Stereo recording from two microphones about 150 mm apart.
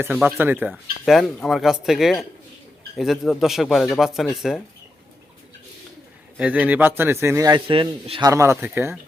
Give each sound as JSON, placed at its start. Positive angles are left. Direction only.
{"t": 0.0, "sound": "speech", "side_deg": -5}
{"t": 0.7, "sound": "speech", "side_deg": 0}
{"t": 6.3, "sound": "speech", "side_deg": -10}
{"t": 7.7, "sound": "speech", "side_deg": -35}
{"t": 8.3, "sound": "speech", "side_deg": -20}